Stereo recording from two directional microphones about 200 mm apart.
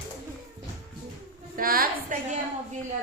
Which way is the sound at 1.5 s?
45° right (ahead or behind).